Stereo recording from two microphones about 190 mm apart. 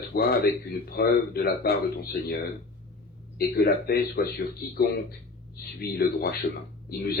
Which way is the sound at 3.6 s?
55° left (ahead or behind).